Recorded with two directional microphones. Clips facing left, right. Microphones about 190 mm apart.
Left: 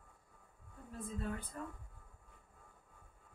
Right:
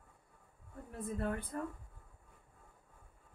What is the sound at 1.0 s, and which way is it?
Speech, 60° right (ahead or behind).